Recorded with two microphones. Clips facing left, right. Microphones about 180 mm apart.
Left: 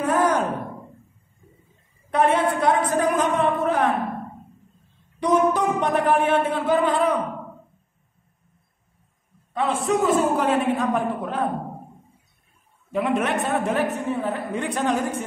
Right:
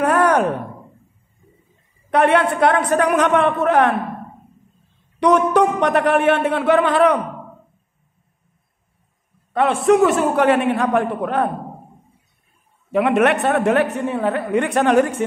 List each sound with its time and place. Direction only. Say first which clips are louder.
0.0 s a sound: right 5 dB; 70° right (ahead or behind)
2.0 s a woman's voice: right 4 dB; 75° right (ahead or behind)
5.2 s a woman's voice: right 5 dB; 70° right (ahead or behind)
9.5 s a woman's voice: right 7 dB; 70° right (ahead or behind)
12.9 s a woman's voice: right 7 dB; 75° right (ahead or behind)